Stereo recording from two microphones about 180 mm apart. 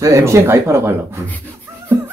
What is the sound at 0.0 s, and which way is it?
A man's voice, 15° right (ahead or behind).